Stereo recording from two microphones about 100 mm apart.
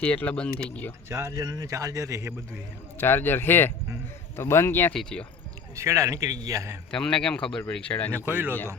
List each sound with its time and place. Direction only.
0.0 s speech: 15° left (ahead or behind)
1.1 s a man's voice: 35° right (ahead or behind)
3.0 s speech: 20° left (ahead or behind)
4.9 s speech: 10° left (ahead or behind)
5.7 s a man's voice: 30° right (ahead or behind)
6.9 s speech: 10° left (ahead or behind)